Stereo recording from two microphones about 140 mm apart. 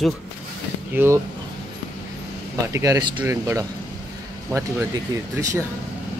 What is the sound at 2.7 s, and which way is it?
Speech, 25° right (ahead or behind).